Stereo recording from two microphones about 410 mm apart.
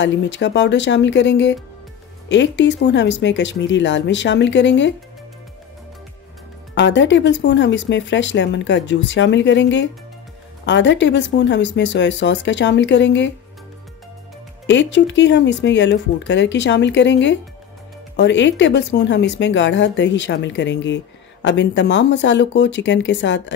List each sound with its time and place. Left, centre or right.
0.0 s speech: left
6.7 s speech: left
14.7 s speech: left